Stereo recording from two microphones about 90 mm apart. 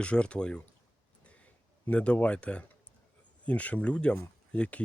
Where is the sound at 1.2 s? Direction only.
15° left (ahead or behind).